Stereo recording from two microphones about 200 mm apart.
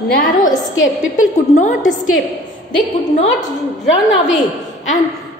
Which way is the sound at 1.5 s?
40° left (ahead or behind).